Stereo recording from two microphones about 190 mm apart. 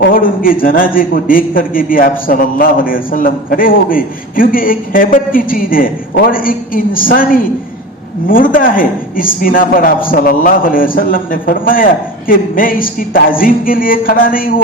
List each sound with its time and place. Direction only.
0.1 s a man's voice: 45° left (ahead or behind)